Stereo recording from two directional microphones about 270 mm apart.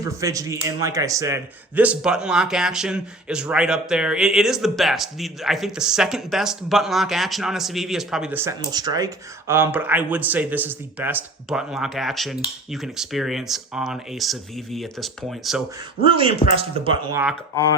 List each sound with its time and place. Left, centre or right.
0.0 s a man's voice: centre
16.0 s speech: centre